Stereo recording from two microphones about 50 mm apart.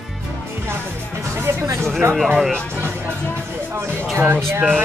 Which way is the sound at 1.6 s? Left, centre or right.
Right.